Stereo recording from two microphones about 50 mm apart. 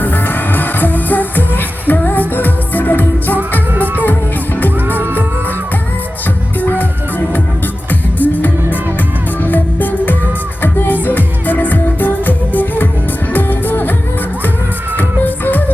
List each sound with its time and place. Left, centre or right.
0.0 s music: left
6.6 s music: left
7.9 s music: left
14.9 s music: left